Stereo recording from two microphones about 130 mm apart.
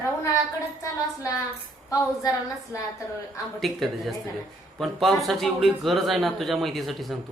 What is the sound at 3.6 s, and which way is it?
Speech, centre (ahead or behind).